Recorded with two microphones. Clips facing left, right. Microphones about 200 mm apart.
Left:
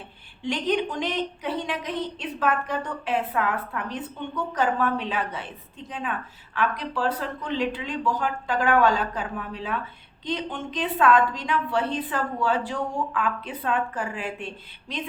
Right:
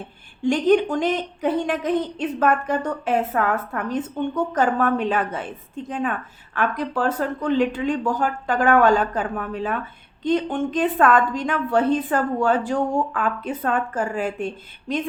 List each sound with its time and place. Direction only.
0.4 s speech: 50° right (ahead or behind)